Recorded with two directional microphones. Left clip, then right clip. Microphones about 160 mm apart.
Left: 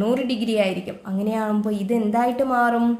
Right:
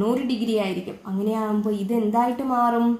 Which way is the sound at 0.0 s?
20° left (ahead or behind).